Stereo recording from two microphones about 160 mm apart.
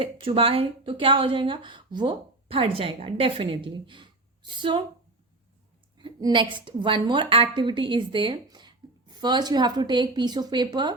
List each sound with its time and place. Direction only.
0.0 s speech: 35° right (ahead or behind)
6.0 s a woman's voice: 25° right (ahead or behind)